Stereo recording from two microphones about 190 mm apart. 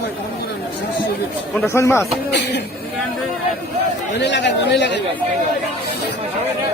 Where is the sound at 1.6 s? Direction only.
15° left (ahead or behind).